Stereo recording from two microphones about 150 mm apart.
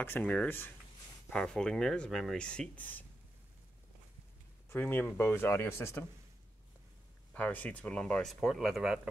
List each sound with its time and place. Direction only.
0.0 s speech: 10° left (ahead or behind)
4.6 s speech: 15° left (ahead or behind)
7.3 s speech: 10° left (ahead or behind)